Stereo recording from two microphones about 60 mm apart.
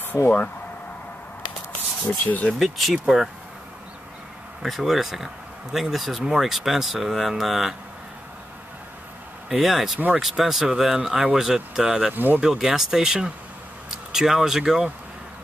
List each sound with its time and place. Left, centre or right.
1.7 s a sound: left
2.6 s speech: centre
4.6 s speech: centre
9.5 s speech: centre
9.9 s speech: right
10.2 s speech: centre
12.1 s speech: right
12.4 s speech: centre